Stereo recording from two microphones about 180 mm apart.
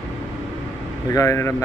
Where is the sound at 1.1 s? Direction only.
15° left (ahead or behind).